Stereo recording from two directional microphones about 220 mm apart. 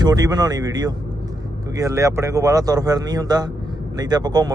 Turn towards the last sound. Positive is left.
turn(degrees=-20)  # may be behind; listen again after turning